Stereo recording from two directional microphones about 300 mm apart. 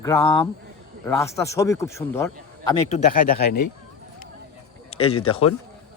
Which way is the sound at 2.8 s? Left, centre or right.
Left.